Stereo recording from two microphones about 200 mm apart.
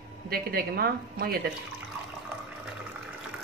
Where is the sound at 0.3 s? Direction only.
50° right (ahead or behind).